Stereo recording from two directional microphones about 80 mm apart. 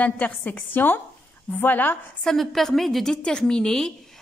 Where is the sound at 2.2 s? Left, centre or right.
Centre.